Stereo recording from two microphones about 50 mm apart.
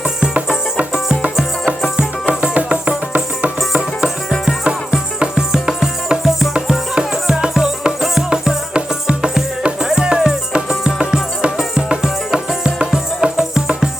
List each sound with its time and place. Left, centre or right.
2.4 s music: right
3.7 s music: centre